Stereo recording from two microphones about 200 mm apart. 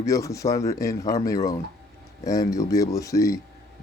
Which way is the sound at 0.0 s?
15° left (ahead or behind).